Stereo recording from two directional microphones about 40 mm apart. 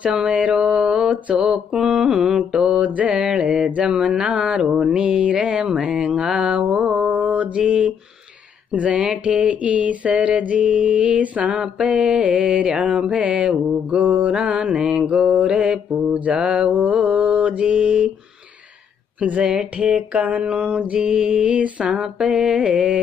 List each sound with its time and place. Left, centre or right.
0.0 s mantra: right
2.8 s a sound: right
3.2 s mantra: right
6.4 s mantra: right
7.5 s mantra: right
8.7 s a sound: right
11.8 s mantra: right
13.2 s a sound: right
14.3 s mantra: right
19.1 s speech: right
19.4 s mantra: right
22.3 s a sound: right